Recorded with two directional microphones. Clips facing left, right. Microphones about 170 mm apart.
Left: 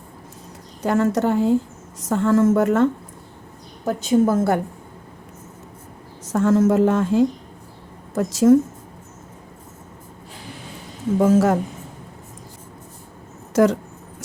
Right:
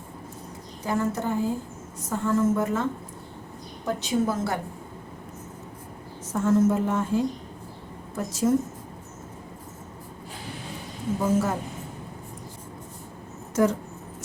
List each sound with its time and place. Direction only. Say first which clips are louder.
0.8 s a woman's voice: left 8 dB; 80° left
3.8 s a woman's voice: left 7 dB; 50° left (ahead or behind)
6.3 s a woman's voice: left 5 dB; 90° left
11.2 s a woman's voice: left 9 dB; 90° left
13.5 s speech: left 6 dB; 80° left